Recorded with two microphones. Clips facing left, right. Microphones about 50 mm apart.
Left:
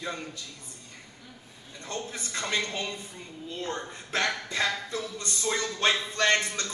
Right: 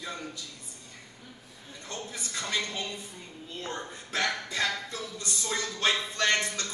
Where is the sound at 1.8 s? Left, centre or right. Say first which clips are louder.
Left 3 dB; left.